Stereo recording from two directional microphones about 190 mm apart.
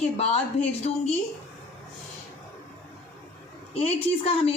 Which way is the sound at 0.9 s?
35° left (ahead or behind).